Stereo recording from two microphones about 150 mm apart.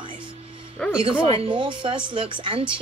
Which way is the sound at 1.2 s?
40° right (ahead or behind).